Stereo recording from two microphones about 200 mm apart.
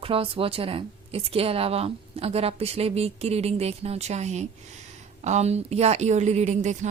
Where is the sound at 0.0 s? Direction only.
25° right (ahead or behind).